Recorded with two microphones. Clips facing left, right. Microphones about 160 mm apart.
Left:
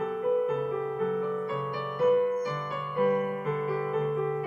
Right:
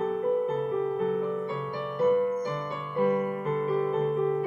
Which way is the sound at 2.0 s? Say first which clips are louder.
Even; 5° left (ahead or behind).